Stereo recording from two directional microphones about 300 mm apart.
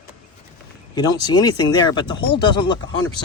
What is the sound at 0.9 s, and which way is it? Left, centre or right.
Speech, centre.